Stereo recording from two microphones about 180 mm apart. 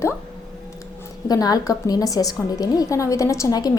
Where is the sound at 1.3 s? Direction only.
20° left (ahead or behind).